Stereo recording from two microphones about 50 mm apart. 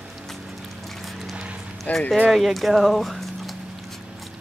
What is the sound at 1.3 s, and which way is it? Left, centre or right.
Clip-clop, right.